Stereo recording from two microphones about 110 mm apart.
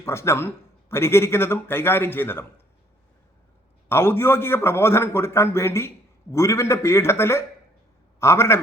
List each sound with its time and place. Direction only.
0.0 s a man's voice: 25° left (ahead or behind)
3.8 s a man's voice: 20° left (ahead or behind)